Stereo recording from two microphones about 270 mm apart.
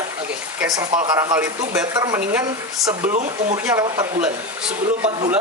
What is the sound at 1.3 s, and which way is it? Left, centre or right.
Speech, centre.